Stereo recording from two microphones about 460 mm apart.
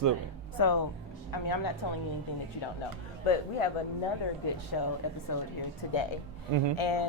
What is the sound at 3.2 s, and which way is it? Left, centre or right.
Music, left.